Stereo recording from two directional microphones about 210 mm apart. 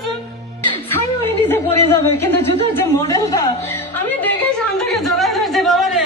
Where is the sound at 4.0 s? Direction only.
10° left (ahead or behind).